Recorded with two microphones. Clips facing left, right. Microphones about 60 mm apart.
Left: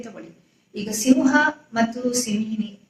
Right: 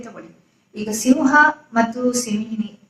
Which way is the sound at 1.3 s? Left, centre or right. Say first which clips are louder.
Right 5 dB; right.